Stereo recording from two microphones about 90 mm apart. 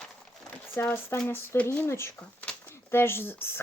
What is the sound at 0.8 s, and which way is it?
Speech, 25° left (ahead or behind).